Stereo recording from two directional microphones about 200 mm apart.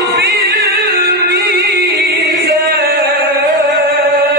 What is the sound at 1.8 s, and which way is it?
Chant, 50° right (ahead or behind).